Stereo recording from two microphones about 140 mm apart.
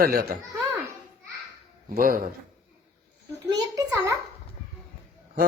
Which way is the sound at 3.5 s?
25° right (ahead or behind).